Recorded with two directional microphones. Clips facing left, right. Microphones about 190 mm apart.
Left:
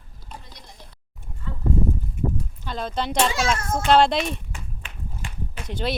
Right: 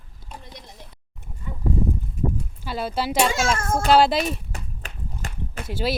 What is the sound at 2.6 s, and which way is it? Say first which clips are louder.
Speech: right 2 dB; 5° right (ahead or behind).